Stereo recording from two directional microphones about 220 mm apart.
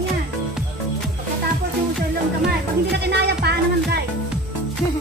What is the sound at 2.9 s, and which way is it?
Music, 50° right (ahead or behind).